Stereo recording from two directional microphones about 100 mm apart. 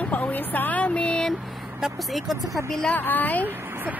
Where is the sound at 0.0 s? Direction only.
15° left (ahead or behind).